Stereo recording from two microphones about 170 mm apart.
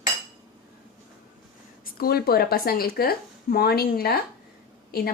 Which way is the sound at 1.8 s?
60° left (ahead or behind).